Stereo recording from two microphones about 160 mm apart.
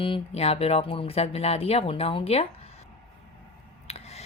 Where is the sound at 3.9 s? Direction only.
40° left (ahead or behind).